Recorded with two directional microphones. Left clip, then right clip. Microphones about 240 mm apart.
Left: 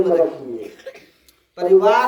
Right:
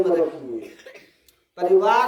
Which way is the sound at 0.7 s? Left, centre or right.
Centre.